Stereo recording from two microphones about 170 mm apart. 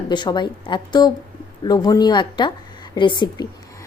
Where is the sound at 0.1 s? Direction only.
25° left (ahead or behind).